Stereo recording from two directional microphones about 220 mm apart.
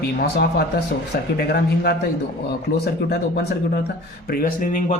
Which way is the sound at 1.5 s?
45° left (ahead or behind).